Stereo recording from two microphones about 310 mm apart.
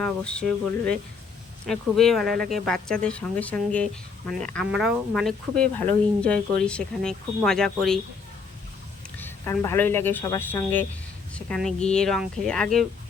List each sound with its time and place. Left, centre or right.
0.0 s speech: centre
1.6 s speech: centre
9.1 s speech: centre